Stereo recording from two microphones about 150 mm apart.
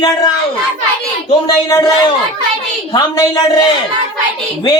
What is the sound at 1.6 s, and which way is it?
Speech, 25° left (ahead or behind).